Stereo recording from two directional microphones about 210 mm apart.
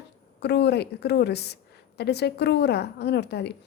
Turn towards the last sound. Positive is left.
turn(degrees=50)  # may be behind; listen again after turning